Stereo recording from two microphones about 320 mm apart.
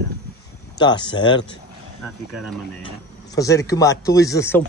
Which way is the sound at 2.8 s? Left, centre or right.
Centre.